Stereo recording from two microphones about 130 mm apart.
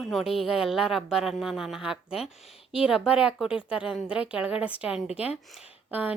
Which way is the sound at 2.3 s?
50° left (ahead or behind).